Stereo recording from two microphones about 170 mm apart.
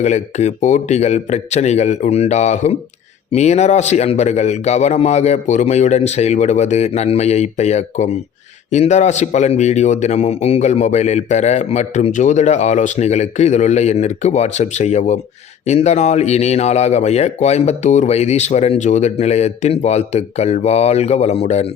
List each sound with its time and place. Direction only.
0.0 s speech: 40° left (ahead or behind)